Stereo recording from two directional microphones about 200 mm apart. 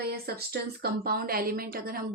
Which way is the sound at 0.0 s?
50° right (ahead or behind).